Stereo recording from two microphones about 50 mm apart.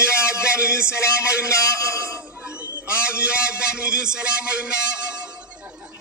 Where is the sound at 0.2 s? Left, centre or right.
Right.